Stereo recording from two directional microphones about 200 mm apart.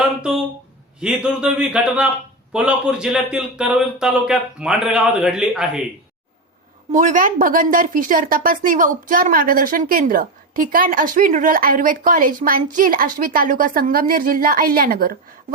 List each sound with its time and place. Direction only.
0.9 s speech: 5° right (ahead or behind)
6.9 s a woman's voice: 40° right (ahead or behind)